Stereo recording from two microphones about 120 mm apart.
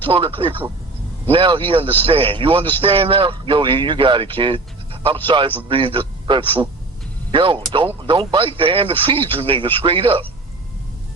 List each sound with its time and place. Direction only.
0.1 s a man's voice: 50° right (ahead or behind)